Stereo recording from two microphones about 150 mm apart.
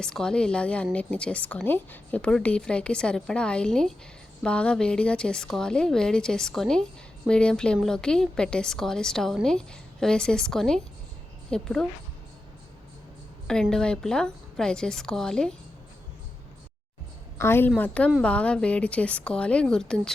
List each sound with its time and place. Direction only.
0.0 s a woman's voice: 5° left (ahead or behind)
13.5 s a woman's voice: 5° left (ahead or behind)
17.3 s a woman's voice: 15° left (ahead or behind)